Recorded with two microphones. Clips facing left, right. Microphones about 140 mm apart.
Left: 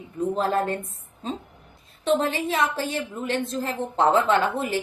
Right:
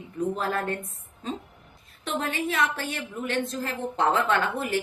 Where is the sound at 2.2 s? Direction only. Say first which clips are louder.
Left 3 dB; 25° left (ahead or behind).